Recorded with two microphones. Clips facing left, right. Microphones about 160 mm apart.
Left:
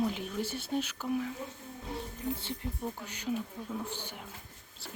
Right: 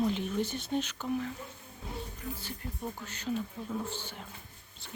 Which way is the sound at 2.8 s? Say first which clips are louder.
Right 1 dB; 10° left (ahead or behind).